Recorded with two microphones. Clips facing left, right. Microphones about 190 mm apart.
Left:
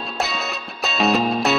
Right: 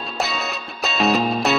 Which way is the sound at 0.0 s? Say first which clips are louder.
Even; centre (ahead or behind).